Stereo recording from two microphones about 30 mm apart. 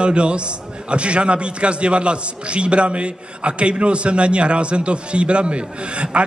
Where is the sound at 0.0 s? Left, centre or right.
Right.